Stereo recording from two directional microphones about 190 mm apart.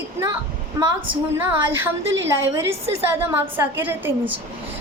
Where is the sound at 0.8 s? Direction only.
15° right (ahead or behind).